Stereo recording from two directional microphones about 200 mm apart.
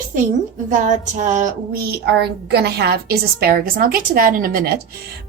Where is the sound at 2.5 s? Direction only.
55° right (ahead or behind).